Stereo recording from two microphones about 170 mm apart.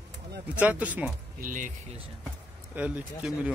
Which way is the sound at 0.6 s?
10° right (ahead or behind).